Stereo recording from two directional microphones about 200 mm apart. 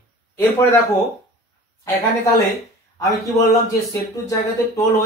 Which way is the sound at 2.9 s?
15° left (ahead or behind).